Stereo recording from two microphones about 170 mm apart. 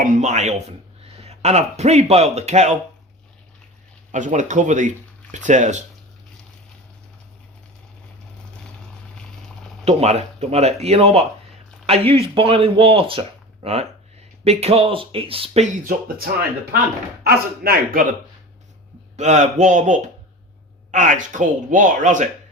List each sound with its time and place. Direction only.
0.0 s speech: 45° right (ahead or behind)
4.1 s speech: 45° right (ahead or behind)
9.8 s speech: 40° right (ahead or behind)
15.9 s a man's voice: 60° right (ahead or behind)
19.1 s speech: 45° right (ahead or behind)